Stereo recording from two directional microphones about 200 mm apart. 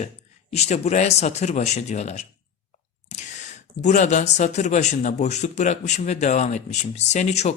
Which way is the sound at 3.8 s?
35° left (ahead or behind).